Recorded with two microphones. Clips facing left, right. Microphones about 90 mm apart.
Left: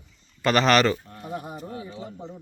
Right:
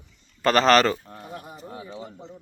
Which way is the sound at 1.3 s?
20° left (ahead or behind).